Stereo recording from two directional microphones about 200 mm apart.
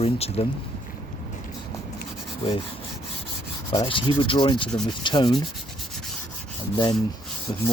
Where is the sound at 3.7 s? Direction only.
25° left (ahead or behind).